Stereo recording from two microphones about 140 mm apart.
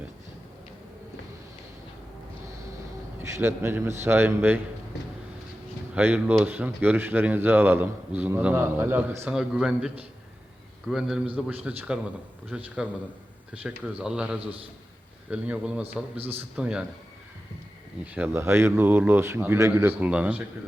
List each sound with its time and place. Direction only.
3.2 s speech: 20° right (ahead or behind)
5.9 s speech: 10° right (ahead or behind)
9.3 s a man's voice: 5° right (ahead or behind)
18.0 s speech: 10° right (ahead or behind)